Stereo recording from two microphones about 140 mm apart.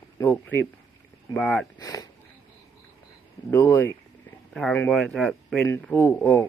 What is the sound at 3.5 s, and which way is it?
Speech, 20° left (ahead or behind).